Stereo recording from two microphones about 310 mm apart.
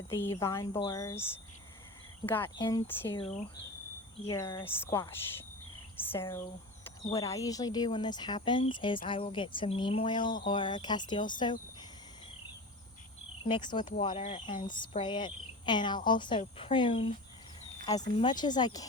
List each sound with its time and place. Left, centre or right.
0.1 s speech: centre
13.4 s speech: centre